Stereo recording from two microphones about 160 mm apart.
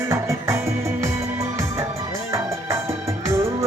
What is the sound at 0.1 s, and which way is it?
Music, 20° right (ahead or behind).